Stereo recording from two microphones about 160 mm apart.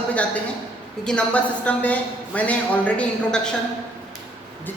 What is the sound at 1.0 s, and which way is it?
A woman's voice, 5° left (ahead or behind).